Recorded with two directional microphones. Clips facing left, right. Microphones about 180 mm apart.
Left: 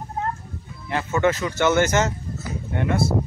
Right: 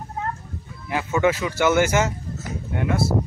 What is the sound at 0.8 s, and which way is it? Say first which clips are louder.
Speech: even; 10° right (ahead or behind).